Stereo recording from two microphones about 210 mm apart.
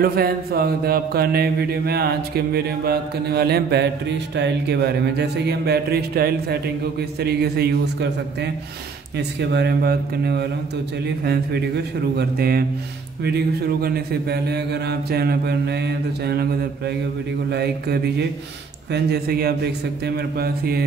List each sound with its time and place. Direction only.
0.0 s mantra: 45° right (ahead or behind)
17.5 s mantra: 50° right (ahead or behind)